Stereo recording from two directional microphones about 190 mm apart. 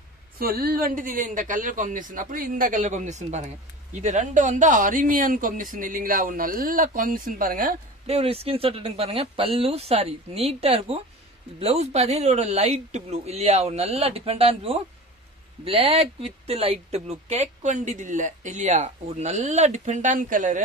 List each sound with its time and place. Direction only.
0.4 s speech: 50° right (ahead or behind)
8.1 s speech: 30° right (ahead or behind)